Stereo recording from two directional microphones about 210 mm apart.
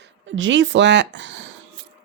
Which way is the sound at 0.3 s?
60° right (ahead or behind).